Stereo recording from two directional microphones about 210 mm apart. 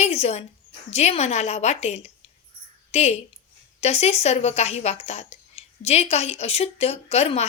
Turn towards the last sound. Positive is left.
turn(degrees=30)  # may be behind; listen again after turning